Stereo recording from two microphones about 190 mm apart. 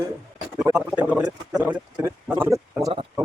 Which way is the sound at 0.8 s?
5° right (ahead or behind).